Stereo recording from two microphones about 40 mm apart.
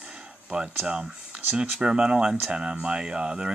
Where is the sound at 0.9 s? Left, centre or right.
Right.